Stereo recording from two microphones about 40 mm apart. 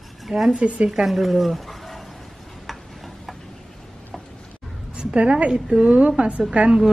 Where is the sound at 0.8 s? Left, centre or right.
Centre.